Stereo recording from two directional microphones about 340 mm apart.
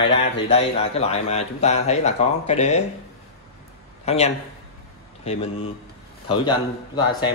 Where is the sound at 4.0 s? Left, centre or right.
Centre.